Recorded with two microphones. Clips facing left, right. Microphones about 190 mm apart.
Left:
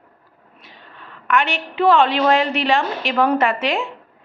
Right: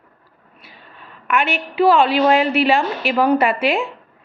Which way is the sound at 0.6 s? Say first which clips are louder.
Even; 15° right (ahead or behind).